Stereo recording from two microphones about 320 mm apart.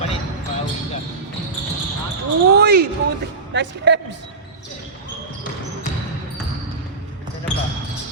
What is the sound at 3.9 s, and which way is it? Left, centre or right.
Speech, right.